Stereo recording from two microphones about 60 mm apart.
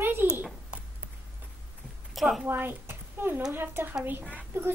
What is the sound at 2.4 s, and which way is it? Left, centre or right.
Speech, right.